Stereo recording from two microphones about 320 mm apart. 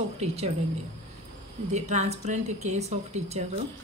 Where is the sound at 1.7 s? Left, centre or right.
Right.